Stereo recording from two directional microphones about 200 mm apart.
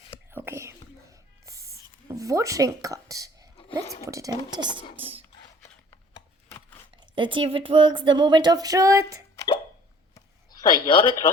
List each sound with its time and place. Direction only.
0.3 s whispering: 10° right (ahead or behind)
4.0 s speech: 15° right (ahead or behind)
6.5 s chopping: 10° left (ahead or behind)
7.0 s speech: 25° right (ahead or behind)
10.2 s a sound: 20° left (ahead or behind)